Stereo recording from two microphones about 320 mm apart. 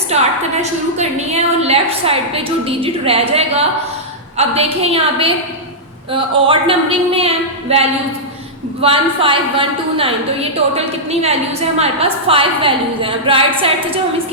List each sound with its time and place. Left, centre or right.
0.1 s a woman's voice: right